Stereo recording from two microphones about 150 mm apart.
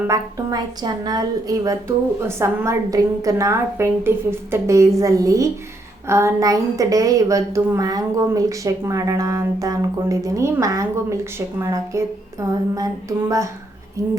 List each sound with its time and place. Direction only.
0.1 s a woman's voice: 25° right (ahead or behind)